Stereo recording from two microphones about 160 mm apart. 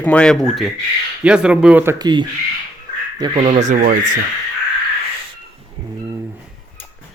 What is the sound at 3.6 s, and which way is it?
Speech, 55° right (ahead or behind).